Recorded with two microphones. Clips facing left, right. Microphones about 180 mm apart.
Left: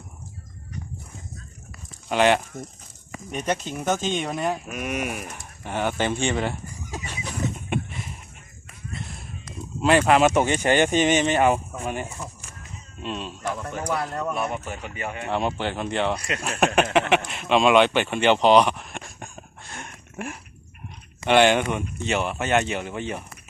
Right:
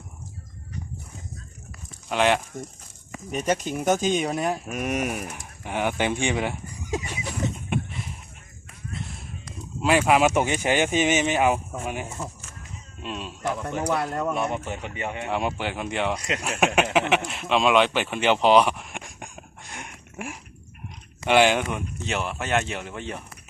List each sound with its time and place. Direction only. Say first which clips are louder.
2.0 s speech: left 2 dB; centre (ahead or behind)
4.7 s speech: right 2 dB; 40° right (ahead or behind)
5.4 s speech: left 2 dB; 10° right (ahead or behind)
8.9 s whip: even; centre (ahead or behind)
9.8 s speech: left 2 dB; 5° right (ahead or behind)
13.4 s speech: right 5 dB; 15° right (ahead or behind)
15.3 s speech: left 3 dB; 5° right (ahead or behind)
16.1 s speech: even; 20° right (ahead or behind)
17.2 s a sound: left 2 dB; 5° right (ahead or behind)
21.2 s speech: left 2 dB; 5° right (ahead or behind)